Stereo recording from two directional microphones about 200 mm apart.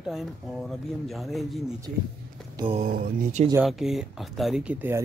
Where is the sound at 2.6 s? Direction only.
30° right (ahead or behind).